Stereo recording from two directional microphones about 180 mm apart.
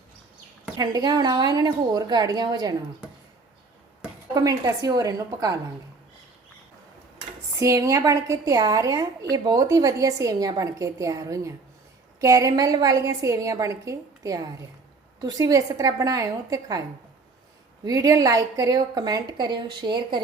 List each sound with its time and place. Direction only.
0.8 s a woman's voice: 25° right (ahead or behind)
4.4 s a woman's voice: 20° right (ahead or behind)
7.6 s a woman's voice: 15° right (ahead or behind)
17.8 s a woman's voice: 20° right (ahead or behind)